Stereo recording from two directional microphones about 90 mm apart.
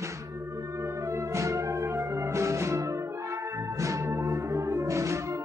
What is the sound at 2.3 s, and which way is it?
Music, 35° right (ahead or behind).